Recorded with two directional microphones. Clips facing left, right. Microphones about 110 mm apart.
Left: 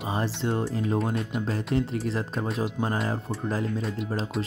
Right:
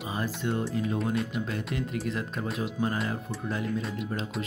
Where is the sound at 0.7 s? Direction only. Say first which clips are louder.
Left 2 dB; 35° left (ahead or behind).